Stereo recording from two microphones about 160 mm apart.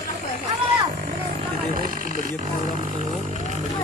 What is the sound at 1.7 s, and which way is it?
Speech, 60° right (ahead or behind).